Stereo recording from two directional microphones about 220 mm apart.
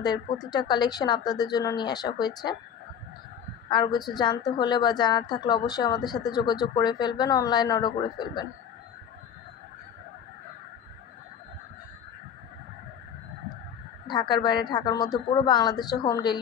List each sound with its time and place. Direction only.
0.5 s a woman's voice: 20° left (ahead or behind)
3.6 s a woman's voice: 20° left (ahead or behind)
14.0 s a woman's voice: 20° left (ahead or behind)